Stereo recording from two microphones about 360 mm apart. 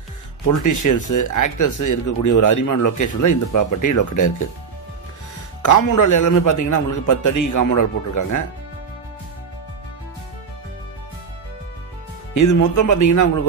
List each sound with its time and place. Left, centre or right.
0.5 s speech: left
5.6 s speech: left
12.4 s speech: left